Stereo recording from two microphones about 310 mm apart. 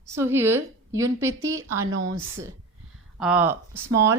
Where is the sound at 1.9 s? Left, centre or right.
Right.